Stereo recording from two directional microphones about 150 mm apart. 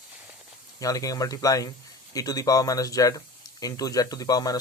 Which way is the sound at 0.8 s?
25° left (ahead or behind).